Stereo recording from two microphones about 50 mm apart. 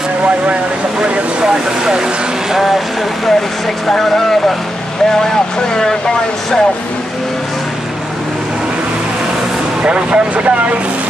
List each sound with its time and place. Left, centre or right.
0.9 s vehicle: centre
1.5 s speech: centre
5.8 s speech: centre
9.8 s speech: right